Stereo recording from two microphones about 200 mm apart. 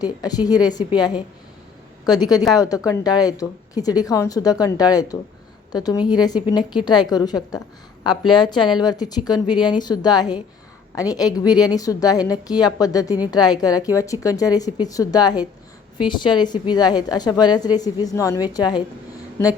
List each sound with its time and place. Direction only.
0.0 s a woman's voice: 20° left (ahead or behind)